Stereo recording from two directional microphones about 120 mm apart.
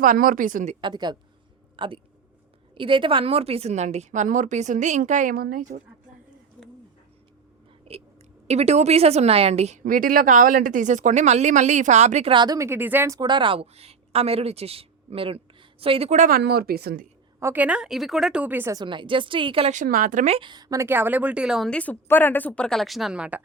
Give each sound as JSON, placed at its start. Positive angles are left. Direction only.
{"t": 0.1, "sound": "a woman's voice", "side_deg": -85}
{"t": 0.8, "sound": "a woman's voice", "side_deg": -40}
{"t": 7.9, "sound": "a sound", "side_deg": -50}
{"t": 8.4, "sound": "speech", "side_deg": -65}
{"t": 10.2, "sound": "a woman's voice", "side_deg": -90}
{"t": 12.3, "sound": "speech", "side_deg": -40}
{"t": 12.5, "sound": "speech", "side_deg": -20}
{"t": 13.1, "sound": "a woman's voice", "side_deg": -40}
{"t": 17.4, "sound": "speech", "side_deg": -15}
{"t": 18.7, "sound": "a woman's voice", "side_deg": -40}
{"t": 19.7, "sound": "speech", "side_deg": -90}
{"t": 20.3, "sound": "speech", "side_deg": -40}
{"t": 20.8, "sound": "speech", "side_deg": -15}
{"t": 21.7, "sound": "speech", "side_deg": 10}